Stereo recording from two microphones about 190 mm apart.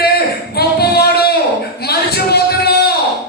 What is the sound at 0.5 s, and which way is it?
Singing, 55° left (ahead or behind).